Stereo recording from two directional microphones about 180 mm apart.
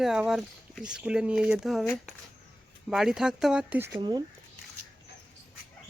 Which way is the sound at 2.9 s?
Centre (ahead or behind).